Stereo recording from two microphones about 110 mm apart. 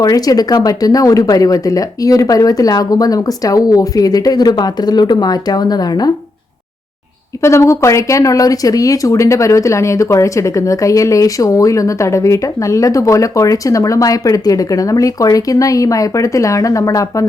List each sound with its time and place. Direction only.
0.0 s speech: 35° left (ahead or behind)
7.4 s speech: 25° left (ahead or behind)